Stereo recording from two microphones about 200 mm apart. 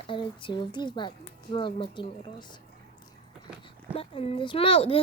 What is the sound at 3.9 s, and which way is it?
Speech, 30° left (ahead or behind).